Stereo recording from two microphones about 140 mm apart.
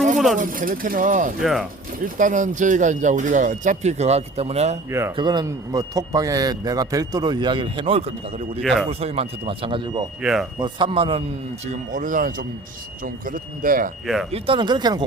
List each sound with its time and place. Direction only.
0.3 s speech: 75° right (ahead or behind)
1.4 s speech: centre (ahead or behind)
2.1 s speech: 65° right (ahead or behind); by 4.8 s 50° right (ahead or behind)
4.9 s a man's voice: 20° right (ahead or behind)
5.1 s a man's voice: 30° right (ahead or behind)
8.6 s speech: centre (ahead or behind)
8.9 s speech: 45° right (ahead or behind)
11.7 s speech: 65° right (ahead or behind)
13.2 s speech: 85° right
14.3 s speech: 40° right (ahead or behind)